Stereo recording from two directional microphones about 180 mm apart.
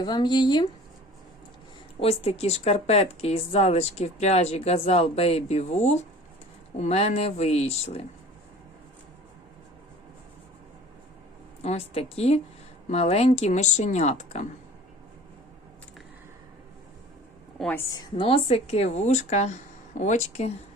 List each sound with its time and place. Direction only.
0.0 s speech: 25° left (ahead or behind)
2.0 s a woman's voice: 35° left (ahead or behind)
11.6 s a woman's voice: 35° left (ahead or behind)
17.6 s a woman's voice: 10° left (ahead or behind)
17.9 s a woman's voice: 30° left (ahead or behind)